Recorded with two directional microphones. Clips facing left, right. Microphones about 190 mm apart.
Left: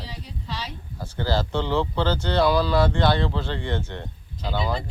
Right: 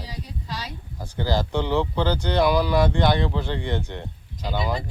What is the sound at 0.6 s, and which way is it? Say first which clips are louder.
Speech: even; 15° right (ahead or behind).